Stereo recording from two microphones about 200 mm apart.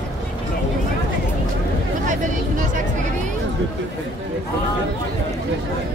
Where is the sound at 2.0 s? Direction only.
40° right (ahead or behind).